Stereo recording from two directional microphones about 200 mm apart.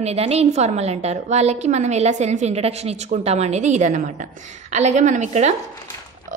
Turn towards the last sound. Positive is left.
turn(degrees=-35)  # may be behind; listen again after turning